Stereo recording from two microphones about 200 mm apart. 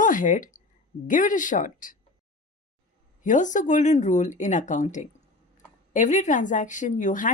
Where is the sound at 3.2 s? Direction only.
40° left (ahead or behind).